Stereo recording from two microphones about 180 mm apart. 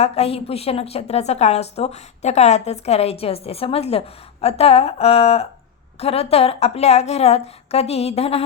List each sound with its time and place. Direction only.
0.0 s a woman's voice: 35° left (ahead or behind)